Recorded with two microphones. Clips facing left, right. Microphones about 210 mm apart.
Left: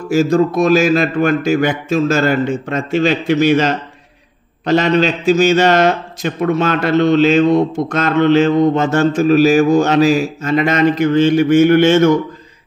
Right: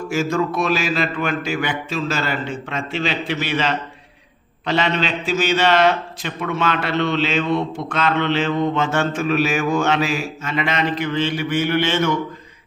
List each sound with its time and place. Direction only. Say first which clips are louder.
0.1 s a man's voice: left 8 dB; 35° left (ahead or behind)